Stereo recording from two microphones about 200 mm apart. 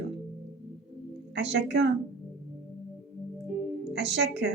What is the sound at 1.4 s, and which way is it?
Speech, 55° right (ahead or behind).